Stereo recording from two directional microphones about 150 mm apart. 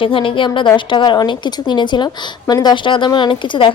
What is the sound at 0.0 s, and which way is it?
A woman's voice, 35° left (ahead or behind).